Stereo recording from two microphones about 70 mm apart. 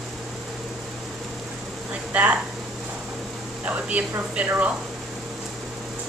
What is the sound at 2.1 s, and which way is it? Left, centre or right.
Speech, right.